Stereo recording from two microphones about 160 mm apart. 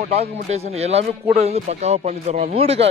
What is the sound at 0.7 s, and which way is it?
Speech, 40° right (ahead or behind).